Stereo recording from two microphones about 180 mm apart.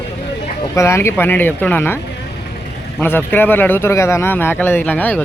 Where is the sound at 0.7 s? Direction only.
15° left (ahead or behind).